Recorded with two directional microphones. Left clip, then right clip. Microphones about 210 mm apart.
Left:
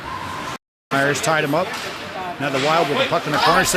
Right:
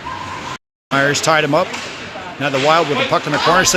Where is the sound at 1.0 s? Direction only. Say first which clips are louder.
Right 4 dB; 20° right (ahead or behind).